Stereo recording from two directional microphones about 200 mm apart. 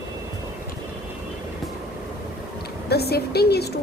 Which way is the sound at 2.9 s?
55° left (ahead or behind).